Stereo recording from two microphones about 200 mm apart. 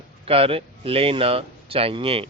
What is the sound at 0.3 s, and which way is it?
Speech, 30° right (ahead or behind).